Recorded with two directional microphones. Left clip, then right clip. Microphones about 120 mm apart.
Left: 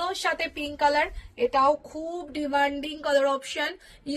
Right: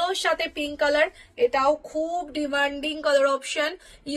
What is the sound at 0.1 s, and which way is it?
A woman's voice, 30° right (ahead or behind).